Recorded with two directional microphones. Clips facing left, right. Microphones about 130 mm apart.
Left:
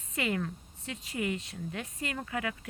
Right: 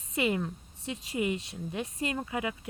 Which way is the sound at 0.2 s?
20° right (ahead or behind).